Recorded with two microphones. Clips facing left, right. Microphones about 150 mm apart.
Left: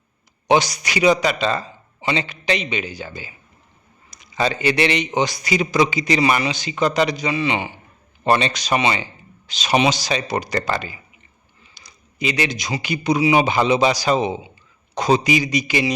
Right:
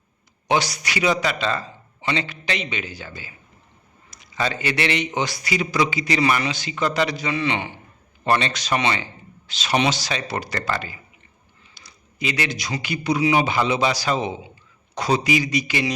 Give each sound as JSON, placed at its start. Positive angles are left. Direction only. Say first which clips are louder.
{"t": 0.4, "sound": "a man's voice", "louder": "left 4 dB", "side_deg": 20}
{"t": 11.7, "sound": "a sound", "louder": "right 1 dB", "side_deg": 20}
{"t": 12.7, "sound": "a man's voice", "louder": "left 3 dB", "side_deg": 20}